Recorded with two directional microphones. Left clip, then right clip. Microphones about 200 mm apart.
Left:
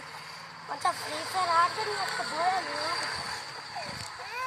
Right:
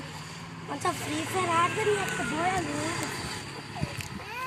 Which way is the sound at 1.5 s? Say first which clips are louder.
Right 1 dB; 10° right (ahead or behind).